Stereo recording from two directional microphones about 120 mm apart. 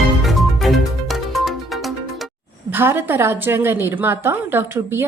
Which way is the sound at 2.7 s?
20° right (ahead or behind).